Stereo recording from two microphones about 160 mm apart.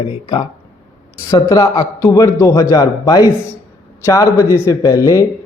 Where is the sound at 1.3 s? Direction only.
20° left (ahead or behind).